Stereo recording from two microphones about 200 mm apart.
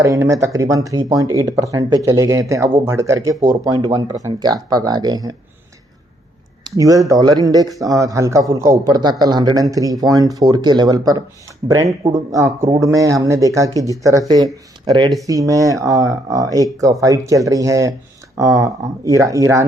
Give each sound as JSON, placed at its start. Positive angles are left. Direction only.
{"t": 0.0, "sound": "speech", "side_deg": -15}
{"t": 6.7, "sound": "speech", "side_deg": -15}